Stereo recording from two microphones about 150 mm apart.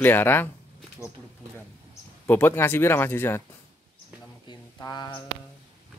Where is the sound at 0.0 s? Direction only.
15° left (ahead or behind).